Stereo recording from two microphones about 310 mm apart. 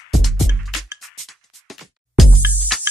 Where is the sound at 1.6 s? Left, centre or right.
Centre.